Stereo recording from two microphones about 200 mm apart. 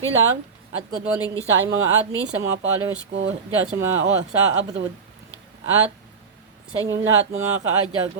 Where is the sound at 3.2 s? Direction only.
65° right (ahead or behind).